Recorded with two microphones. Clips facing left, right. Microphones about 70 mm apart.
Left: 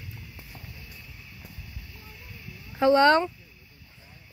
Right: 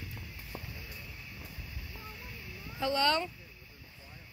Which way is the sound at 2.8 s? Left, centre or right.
Left.